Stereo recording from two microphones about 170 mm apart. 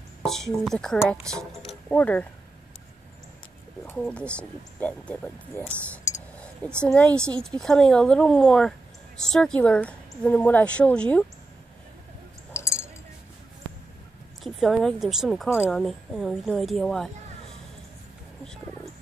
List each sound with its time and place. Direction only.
0.2 s speech: centre (ahead or behind)
3.8 s speech: 10° left (ahead or behind)
6.9 s speech: 5° left (ahead or behind)
12.5 s chink: 15° left (ahead or behind)
14.4 s speech: centre (ahead or behind)